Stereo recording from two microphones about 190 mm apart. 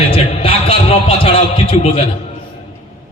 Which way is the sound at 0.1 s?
30° left (ahead or behind).